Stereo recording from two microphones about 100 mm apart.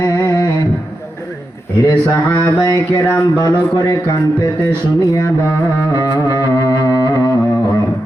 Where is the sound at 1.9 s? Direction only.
35° left (ahead or behind).